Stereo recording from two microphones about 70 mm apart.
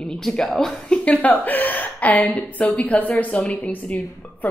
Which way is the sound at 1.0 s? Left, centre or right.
Left.